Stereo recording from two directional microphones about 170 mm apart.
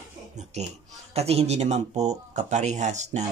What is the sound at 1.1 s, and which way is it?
A man's voice, 40° right (ahead or behind).